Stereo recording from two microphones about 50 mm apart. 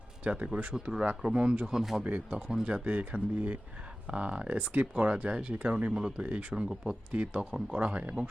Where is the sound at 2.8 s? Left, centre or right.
Right.